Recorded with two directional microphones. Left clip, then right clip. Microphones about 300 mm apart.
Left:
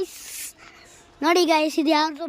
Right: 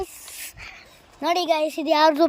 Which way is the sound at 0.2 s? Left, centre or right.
Centre.